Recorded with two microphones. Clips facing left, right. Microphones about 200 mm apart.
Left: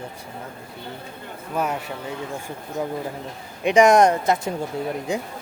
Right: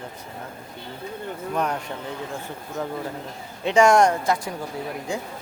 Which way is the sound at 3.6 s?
20° left (ahead or behind).